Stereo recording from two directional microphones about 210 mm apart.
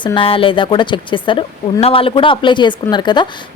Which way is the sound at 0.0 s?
25° left (ahead or behind).